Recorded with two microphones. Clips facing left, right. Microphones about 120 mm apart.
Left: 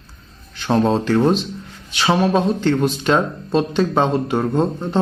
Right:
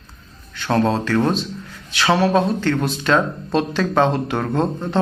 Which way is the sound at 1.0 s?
20° left (ahead or behind).